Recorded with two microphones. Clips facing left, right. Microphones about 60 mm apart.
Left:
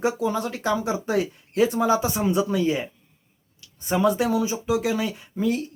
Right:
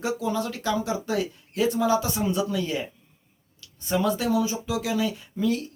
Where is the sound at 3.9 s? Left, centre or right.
Left.